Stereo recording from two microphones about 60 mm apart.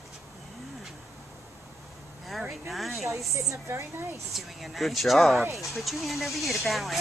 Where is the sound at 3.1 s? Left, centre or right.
Right.